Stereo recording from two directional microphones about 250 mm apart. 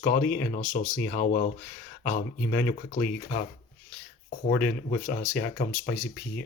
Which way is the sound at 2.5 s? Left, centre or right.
Centre.